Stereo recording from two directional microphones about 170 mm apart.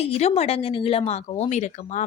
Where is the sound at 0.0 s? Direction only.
40° left (ahead or behind).